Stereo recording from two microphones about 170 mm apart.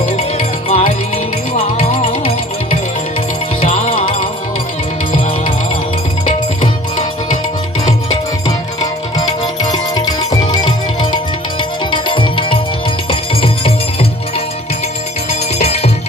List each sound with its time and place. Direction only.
0.3 s music: 40° left (ahead or behind)
6.2 s music: 50° left (ahead or behind)
9.1 s music: 25° left (ahead or behind); by 15.9 s 40° left (ahead or behind)